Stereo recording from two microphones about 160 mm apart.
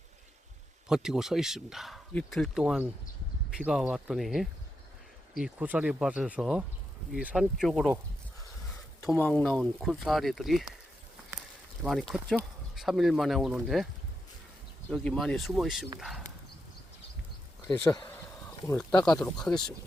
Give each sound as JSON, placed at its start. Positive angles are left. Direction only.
{"t": 0.9, "sound": "speech", "side_deg": -5}
{"t": 9.0, "sound": "speech", "side_deg": 15}
{"t": 11.8, "sound": "speech", "side_deg": 0}
{"t": 14.8, "sound": "speech", "side_deg": 5}
{"t": 17.8, "sound": "speech", "side_deg": 25}
{"t": 18.8, "sound": "speech", "side_deg": 5}